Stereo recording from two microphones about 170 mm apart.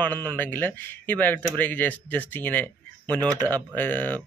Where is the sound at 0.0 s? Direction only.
10° left (ahead or behind).